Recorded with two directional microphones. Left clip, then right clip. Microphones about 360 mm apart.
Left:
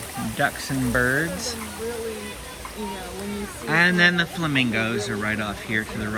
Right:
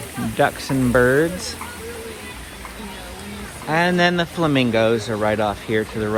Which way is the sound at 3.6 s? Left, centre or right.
Centre.